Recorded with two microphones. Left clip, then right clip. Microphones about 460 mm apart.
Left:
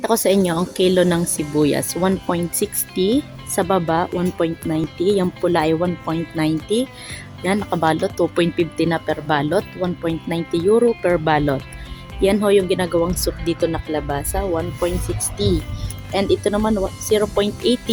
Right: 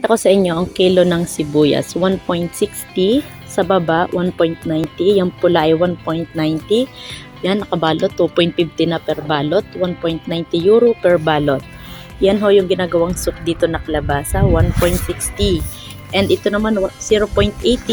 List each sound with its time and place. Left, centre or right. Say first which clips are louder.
0.0 s a woman's voice: right 4 dB; left